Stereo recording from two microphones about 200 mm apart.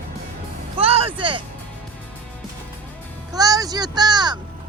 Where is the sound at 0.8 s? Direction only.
30° right (ahead or behind).